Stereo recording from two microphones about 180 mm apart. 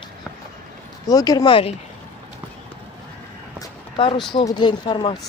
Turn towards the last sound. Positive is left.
turn(degrees=25)  # may be behind; listen again after turning